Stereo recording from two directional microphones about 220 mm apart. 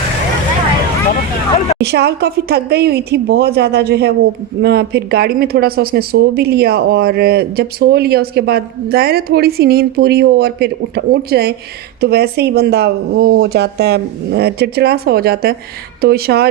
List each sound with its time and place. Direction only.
1.8 s speech: 50° right (ahead or behind)